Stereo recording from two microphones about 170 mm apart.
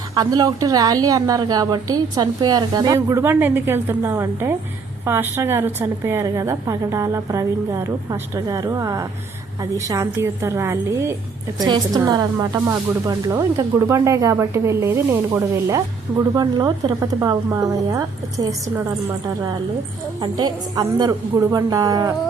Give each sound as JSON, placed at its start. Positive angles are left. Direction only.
{"t": 0.1, "sound": "a woman's voice", "side_deg": -20}
{"t": 20.2, "sound": "a woman's voice", "side_deg": -25}